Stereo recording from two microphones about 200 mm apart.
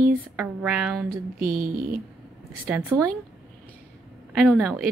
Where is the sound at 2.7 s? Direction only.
5° right (ahead or behind).